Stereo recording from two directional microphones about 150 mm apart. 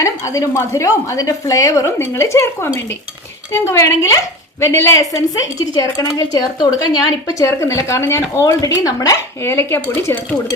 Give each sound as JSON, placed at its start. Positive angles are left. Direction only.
{"t": 0.0, "sound": "a woman's voice", "side_deg": 20}